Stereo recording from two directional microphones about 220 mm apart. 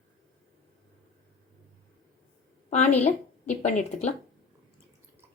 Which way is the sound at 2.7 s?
30° left (ahead or behind).